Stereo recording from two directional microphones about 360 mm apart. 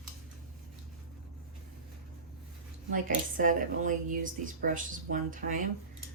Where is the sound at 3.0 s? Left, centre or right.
Right.